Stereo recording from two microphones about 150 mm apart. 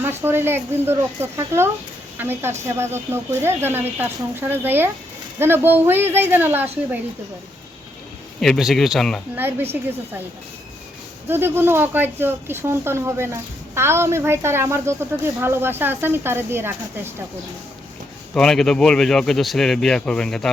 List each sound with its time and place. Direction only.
0.0 s a woman's voice: 15° right (ahead or behind)
8.4 s speech: centre (ahead or behind)
9.3 s speech: 15° right (ahead or behind)
11.3 s speech: 15° right (ahead or behind)
18.3 s speech: 5° left (ahead or behind)